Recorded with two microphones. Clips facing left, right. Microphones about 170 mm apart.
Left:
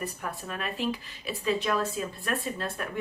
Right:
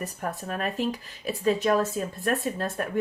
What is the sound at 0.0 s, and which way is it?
Speech, 45° right (ahead or behind).